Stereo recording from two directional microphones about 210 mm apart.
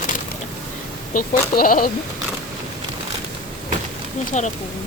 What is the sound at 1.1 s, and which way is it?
Speech, 40° left (ahead or behind).